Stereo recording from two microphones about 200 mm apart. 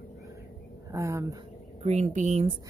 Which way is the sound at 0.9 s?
15° right (ahead or behind).